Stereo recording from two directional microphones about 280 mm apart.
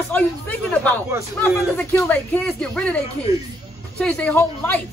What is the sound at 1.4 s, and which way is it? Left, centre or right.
Speech, centre.